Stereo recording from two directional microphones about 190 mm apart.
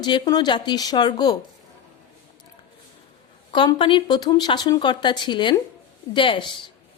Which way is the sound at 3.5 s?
25° left (ahead or behind).